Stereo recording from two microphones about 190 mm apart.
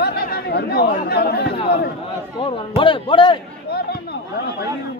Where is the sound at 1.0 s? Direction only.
55° left (ahead or behind).